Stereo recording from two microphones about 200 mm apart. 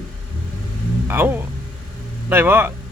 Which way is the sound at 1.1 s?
10° right (ahead or behind).